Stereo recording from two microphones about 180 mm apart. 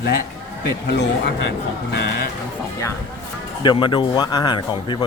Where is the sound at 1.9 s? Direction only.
70° left (ahead or behind).